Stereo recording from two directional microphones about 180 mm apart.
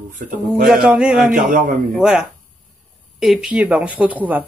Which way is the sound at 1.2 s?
45° right (ahead or behind).